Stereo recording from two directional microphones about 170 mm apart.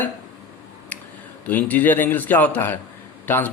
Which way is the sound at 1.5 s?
10° left (ahead or behind).